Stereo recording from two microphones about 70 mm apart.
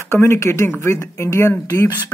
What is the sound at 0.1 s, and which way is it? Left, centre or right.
Speech, left.